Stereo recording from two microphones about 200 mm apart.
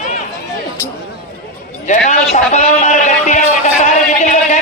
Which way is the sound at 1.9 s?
35° left (ahead or behind).